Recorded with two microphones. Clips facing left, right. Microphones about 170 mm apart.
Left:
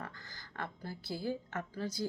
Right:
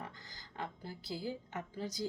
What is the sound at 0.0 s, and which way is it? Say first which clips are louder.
A woman's voice: left 2 dB; 15° right (ahead or behind).